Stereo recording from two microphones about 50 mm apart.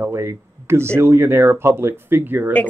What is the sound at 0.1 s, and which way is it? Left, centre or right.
Speech, right.